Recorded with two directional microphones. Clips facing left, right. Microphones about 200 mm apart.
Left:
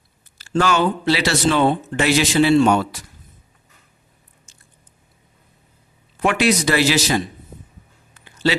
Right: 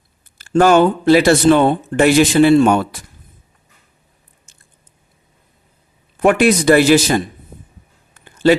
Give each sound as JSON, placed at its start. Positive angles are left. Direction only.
{"t": 0.3, "sound": "speech", "side_deg": -50}
{"t": 6.1, "sound": "speech", "side_deg": -50}
{"t": 8.2, "sound": "a sound", "side_deg": -50}